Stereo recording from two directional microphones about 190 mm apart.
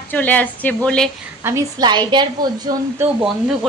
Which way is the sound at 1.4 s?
20° right (ahead or behind).